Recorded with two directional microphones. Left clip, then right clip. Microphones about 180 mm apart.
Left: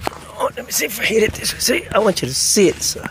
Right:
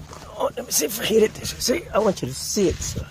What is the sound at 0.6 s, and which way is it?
Speech, 40° right (ahead or behind).